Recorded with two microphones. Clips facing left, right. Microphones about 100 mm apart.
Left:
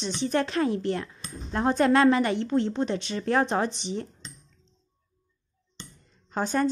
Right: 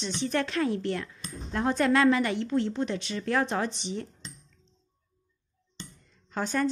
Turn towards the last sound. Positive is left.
turn(degrees=25)  # may be behind; listen again after turning